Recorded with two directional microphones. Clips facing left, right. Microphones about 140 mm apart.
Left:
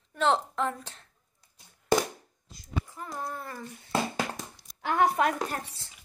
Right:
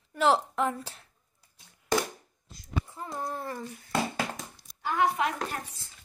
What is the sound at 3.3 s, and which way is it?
Child singing, 30° right (ahead or behind).